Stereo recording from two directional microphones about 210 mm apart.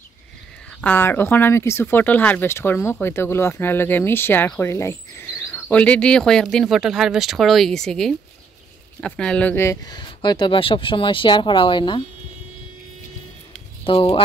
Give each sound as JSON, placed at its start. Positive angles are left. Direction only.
{"t": 0.8, "sound": "speech", "side_deg": 10}
{"t": 13.8, "sound": "speech", "side_deg": 25}